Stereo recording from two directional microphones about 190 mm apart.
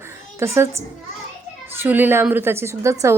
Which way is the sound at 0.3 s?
15° right (ahead or behind).